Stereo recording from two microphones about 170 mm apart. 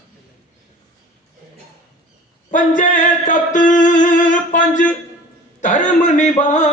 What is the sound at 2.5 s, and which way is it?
Music, 50° left (ahead or behind).